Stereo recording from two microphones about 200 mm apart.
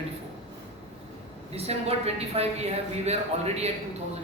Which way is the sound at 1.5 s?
30° right (ahead or behind).